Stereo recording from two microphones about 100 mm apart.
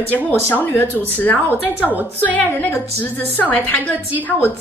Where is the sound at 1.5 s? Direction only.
15° right (ahead or behind).